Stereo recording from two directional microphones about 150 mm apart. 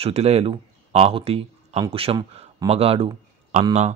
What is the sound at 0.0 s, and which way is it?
A man's voice, 45° right (ahead or behind).